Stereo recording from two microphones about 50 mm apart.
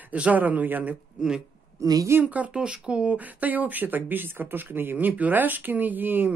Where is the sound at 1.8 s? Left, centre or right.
Right.